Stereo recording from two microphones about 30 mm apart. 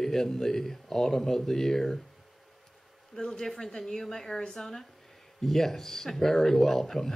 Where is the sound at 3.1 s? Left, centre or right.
Centre.